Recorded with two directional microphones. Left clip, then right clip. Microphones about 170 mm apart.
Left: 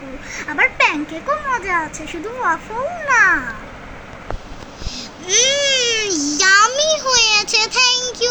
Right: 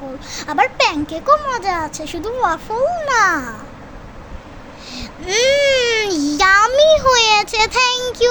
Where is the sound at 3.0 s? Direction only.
90° right.